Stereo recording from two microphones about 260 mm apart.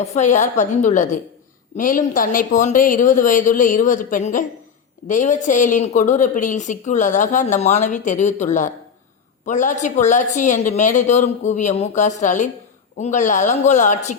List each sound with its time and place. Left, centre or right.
0.0 s a woman's voice: left